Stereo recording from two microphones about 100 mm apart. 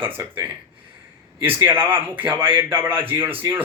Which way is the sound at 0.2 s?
20° right (ahead or behind).